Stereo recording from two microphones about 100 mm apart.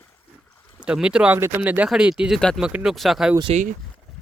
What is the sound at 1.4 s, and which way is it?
Speech, 20° right (ahead or behind).